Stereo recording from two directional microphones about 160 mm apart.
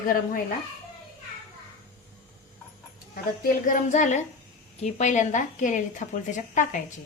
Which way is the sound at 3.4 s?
55° left (ahead or behind).